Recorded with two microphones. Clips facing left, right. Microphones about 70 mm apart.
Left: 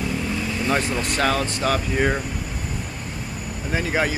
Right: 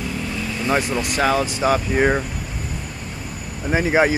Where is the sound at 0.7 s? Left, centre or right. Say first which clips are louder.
Right 3 dB; centre.